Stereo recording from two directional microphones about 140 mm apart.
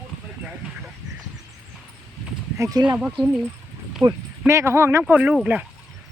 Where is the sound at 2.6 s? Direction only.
25° right (ahead or behind).